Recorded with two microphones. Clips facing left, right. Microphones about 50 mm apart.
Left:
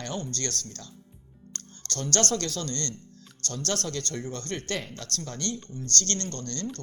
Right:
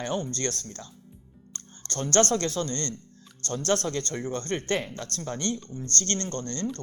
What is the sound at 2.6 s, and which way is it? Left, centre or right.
Speech, right.